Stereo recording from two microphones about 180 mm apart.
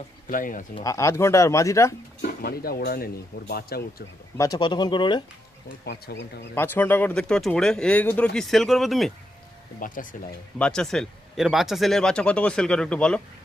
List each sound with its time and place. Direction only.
0.3 s speech: 50° left (ahead or behind)
0.9 s speech: 15° left (ahead or behind)
2.4 s speech: 60° left (ahead or behind)
4.4 s speech: 20° left (ahead or behind)
5.8 s speech: 65° left (ahead or behind)
6.5 s speech: 10° left (ahead or behind)
9.8 s speech: 50° left (ahead or behind)
10.6 s speech: 5° left (ahead or behind)